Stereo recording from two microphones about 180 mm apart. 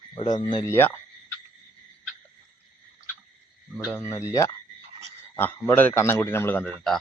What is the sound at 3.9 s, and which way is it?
Speech, 15° left (ahead or behind).